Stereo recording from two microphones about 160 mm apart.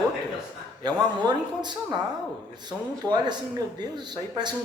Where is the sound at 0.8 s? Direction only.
25° right (ahead or behind).